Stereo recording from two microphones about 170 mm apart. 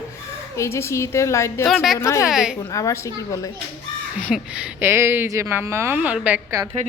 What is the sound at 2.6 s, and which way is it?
Speech, 20° left (ahead or behind).